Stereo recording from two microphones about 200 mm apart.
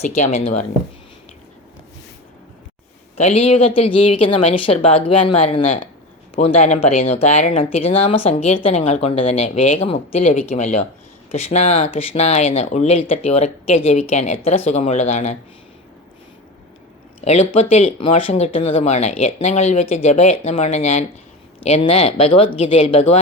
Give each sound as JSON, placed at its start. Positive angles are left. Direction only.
{"t": 0.0, "sound": "speech", "side_deg": 35}
{"t": 3.2, "sound": "speech", "side_deg": 30}
{"t": 17.2, "sound": "speech", "side_deg": 30}